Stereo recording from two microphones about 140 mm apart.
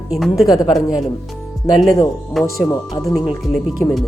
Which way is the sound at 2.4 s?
20° left (ahead or behind).